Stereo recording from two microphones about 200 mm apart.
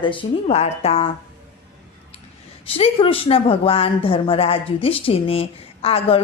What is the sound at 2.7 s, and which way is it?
A woman's voice, 30° left (ahead or behind).